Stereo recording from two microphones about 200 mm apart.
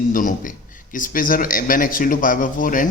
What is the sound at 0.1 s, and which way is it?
A man's voice, 40° left (ahead or behind).